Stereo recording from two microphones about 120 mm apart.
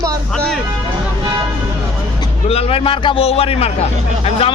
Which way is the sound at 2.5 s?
55° left (ahead or behind).